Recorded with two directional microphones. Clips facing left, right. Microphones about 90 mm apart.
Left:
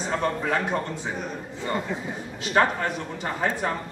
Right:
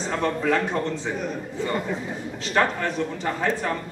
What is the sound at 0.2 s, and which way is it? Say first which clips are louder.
Speech: right 6 dB; 10° left (ahead or behind).